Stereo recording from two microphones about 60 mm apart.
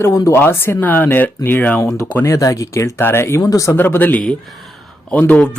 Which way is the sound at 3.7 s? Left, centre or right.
Left.